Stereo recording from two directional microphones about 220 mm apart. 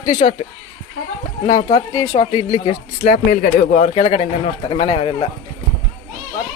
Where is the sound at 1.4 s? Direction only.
30° left (ahead or behind).